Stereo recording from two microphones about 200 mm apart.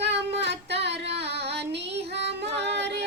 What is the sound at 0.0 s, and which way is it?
Female singing, 60° right (ahead or behind).